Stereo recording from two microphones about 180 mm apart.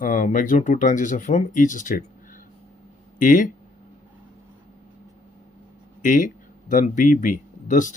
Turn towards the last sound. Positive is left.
turn(degrees=45)  # may be behind; listen again after turning